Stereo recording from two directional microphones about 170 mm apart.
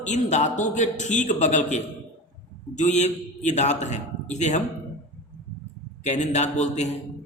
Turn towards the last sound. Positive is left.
turn(degrees=40)  # may be behind; listen again after turning